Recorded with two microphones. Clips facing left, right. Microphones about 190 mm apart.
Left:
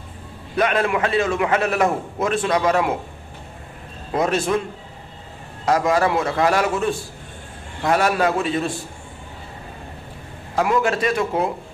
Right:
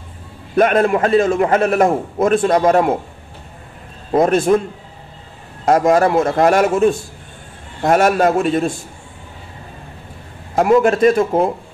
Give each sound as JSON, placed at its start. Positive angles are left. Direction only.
{"t": 0.6, "sound": "a man's voice", "side_deg": -45}
{"t": 4.1, "sound": "a man's voice", "side_deg": -50}
{"t": 5.7, "sound": "a man's voice", "side_deg": -50}
{"t": 10.8, "sound": "a man's voice", "side_deg": -50}